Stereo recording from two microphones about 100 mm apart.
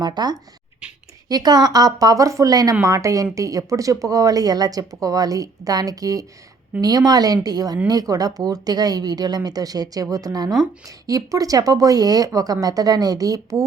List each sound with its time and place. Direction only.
0.0 s speech: 40° right (ahead or behind)